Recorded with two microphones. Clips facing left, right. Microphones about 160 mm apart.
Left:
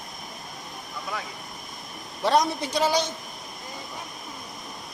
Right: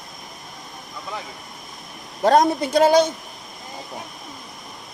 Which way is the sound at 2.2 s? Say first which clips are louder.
Right 6 dB; 50° right (ahead or behind).